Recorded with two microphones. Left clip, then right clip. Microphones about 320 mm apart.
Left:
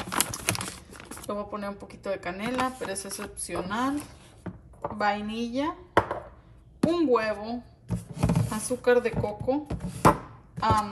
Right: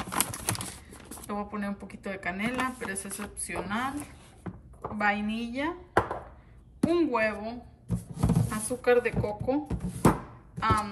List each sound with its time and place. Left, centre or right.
0.0 s speech: centre
4.4 s chopping: centre
6.8 s speech: centre
8.0 s a sound: centre